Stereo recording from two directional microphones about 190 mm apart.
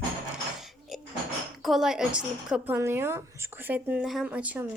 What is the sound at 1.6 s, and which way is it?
A woman's voice, centre (ahead or behind).